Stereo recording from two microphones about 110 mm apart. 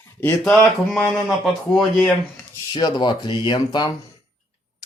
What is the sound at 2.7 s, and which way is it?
Speech, 45° left (ahead or behind).